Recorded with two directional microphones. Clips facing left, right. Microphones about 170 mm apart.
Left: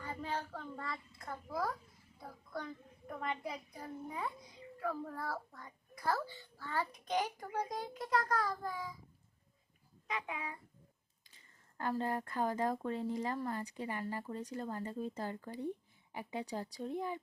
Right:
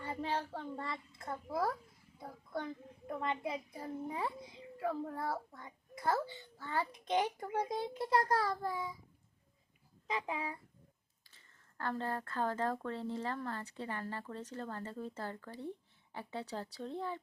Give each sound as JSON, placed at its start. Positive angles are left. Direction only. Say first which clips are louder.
{"t": 0.0, "sound": "a child's voice", "louder": "right 3 dB", "side_deg": -30}
{"t": 10.1, "sound": "a child's voice", "louder": "right 3 dB", "side_deg": -30}
{"t": 11.3, "sound": "speech", "louder": "left 1 dB", "side_deg": 15}